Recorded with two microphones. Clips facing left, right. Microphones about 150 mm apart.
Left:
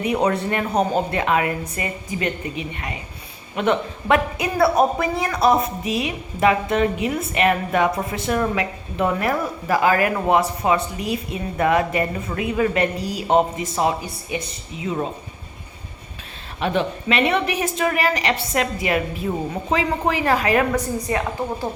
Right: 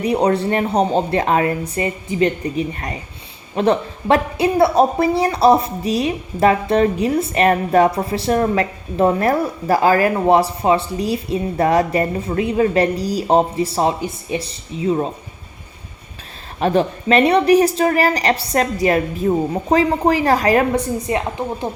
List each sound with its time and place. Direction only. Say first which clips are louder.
0.0 s speech: right 4 dB; 35° right (ahead or behind)
16.6 s speech: right 5 dB; 40° right (ahead or behind)